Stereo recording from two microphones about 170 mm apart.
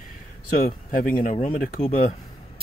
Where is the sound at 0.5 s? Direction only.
50° left (ahead or behind).